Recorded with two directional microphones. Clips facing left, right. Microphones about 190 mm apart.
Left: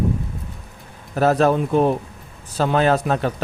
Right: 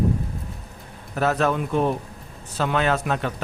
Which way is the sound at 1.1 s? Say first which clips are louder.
Left 5 dB; 35° left (ahead or behind).